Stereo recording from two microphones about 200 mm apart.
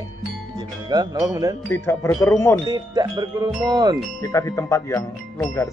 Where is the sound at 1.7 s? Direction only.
10° left (ahead or behind).